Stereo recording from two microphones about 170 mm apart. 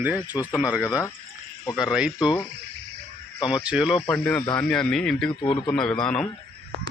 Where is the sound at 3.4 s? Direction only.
30° left (ahead or behind).